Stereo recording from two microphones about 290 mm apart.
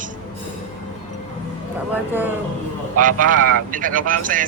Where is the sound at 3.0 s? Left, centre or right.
Right.